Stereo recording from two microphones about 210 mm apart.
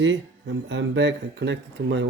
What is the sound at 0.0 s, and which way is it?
Speech, 60° right (ahead or behind).